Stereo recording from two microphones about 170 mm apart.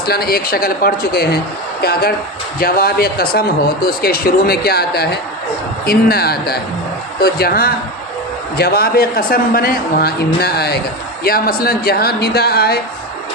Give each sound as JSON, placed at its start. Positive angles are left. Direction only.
{"t": 0.0, "sound": "a man's voice", "side_deg": 65}